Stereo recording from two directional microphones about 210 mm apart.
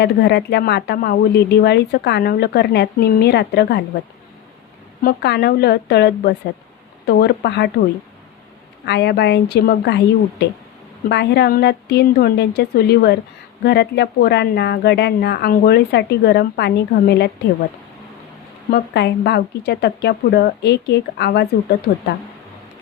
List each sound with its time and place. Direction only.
0.0 s speech: 50° left (ahead or behind)
5.0 s speech: 50° left (ahead or behind)
8.9 s speech: 50° left (ahead or behind)
18.7 s speech: 50° left (ahead or behind)